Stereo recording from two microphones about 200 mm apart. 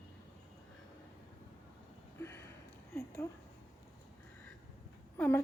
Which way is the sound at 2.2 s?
15° left (ahead or behind).